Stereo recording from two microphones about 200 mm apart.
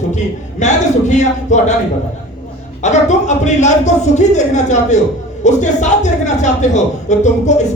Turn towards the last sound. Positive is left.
turn(degrees=35)  # may be behind; listen again after turning